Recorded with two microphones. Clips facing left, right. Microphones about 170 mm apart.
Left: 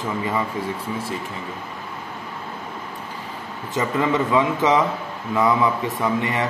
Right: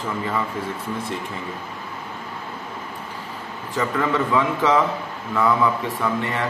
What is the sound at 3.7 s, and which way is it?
Speech, 20° left (ahead or behind).